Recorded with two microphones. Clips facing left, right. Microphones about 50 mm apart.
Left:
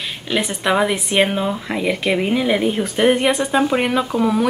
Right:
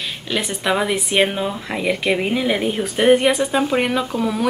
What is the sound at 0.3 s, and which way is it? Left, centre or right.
Speech, centre.